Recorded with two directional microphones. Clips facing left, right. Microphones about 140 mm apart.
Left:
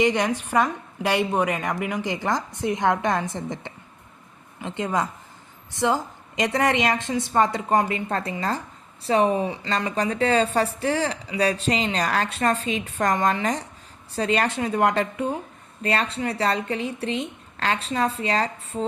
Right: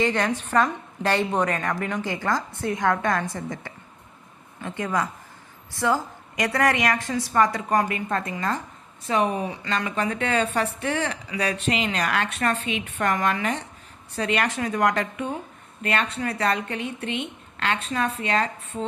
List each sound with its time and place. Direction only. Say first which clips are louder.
0.0 s a woman's voice: left 2 dB; 15° left (ahead or behind); by 18.9 s 35° left (ahead or behind)